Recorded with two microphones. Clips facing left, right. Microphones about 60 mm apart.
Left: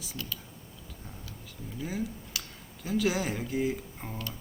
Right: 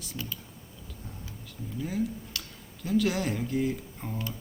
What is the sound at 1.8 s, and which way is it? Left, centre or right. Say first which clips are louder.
Speech: right 3 dB; centre.